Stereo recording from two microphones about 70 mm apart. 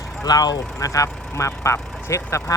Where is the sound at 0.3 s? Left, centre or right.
Left.